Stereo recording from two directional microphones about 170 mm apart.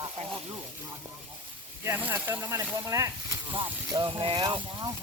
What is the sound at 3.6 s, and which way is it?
Speech, 25° right (ahead or behind).